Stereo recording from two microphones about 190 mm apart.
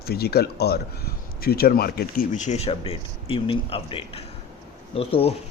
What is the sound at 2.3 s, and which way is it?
Speech, 40° left (ahead or behind).